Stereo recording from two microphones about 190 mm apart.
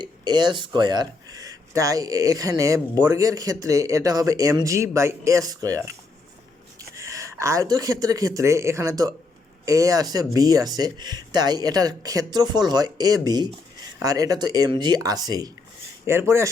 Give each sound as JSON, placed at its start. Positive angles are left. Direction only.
{"t": 0.0, "sound": "speech", "side_deg": -25}